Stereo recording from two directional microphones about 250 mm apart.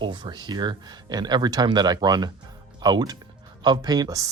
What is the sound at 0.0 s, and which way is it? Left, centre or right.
Speech, centre.